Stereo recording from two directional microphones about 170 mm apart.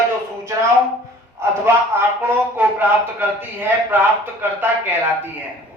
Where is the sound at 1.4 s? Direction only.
15° right (ahead or behind).